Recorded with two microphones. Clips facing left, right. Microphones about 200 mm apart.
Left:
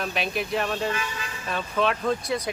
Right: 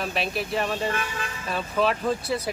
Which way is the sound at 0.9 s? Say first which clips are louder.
Right 1 dB; 55° right (ahead or behind).